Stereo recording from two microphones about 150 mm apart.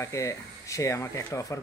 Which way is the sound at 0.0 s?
20° left (ahead or behind).